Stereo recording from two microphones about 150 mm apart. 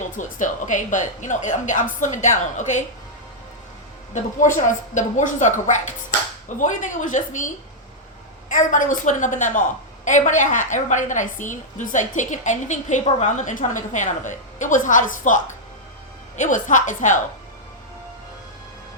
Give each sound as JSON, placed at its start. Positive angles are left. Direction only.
{"t": 0.0, "sound": "a woman's voice", "side_deg": 55}
{"t": 4.5, "sound": "a woman's voice", "side_deg": 55}
{"t": 16.4, "sound": "a woman's voice", "side_deg": 55}